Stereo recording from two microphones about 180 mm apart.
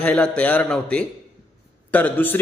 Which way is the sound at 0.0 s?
5° left (ahead or behind).